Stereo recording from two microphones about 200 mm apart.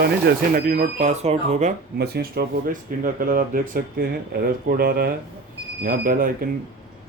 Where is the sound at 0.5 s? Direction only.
45° right (ahead or behind).